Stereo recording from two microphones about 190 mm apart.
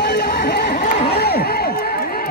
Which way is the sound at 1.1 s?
55° left (ahead or behind).